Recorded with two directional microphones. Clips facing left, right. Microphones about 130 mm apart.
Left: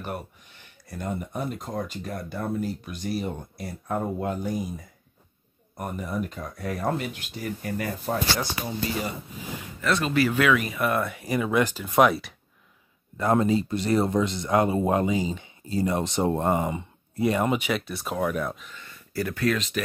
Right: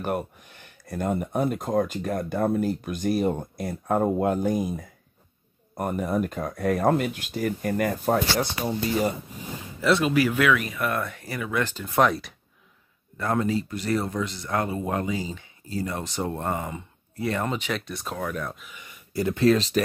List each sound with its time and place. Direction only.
0.8 s speech: 55° right (ahead or behind)
5.8 s speech: 50° right (ahead or behind)
9.8 s speech: 10° right (ahead or behind)
10.5 s speech: 5° left (ahead or behind)
13.2 s speech: 20° left (ahead or behind); by 18.7 s 5° left (ahead or behind)
18.7 s speech: 15° right (ahead or behind); by 19.8 s 35° right (ahead or behind)